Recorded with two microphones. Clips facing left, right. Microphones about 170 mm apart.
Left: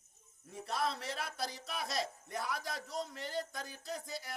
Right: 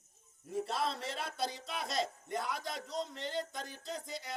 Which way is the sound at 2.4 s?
20° right (ahead or behind).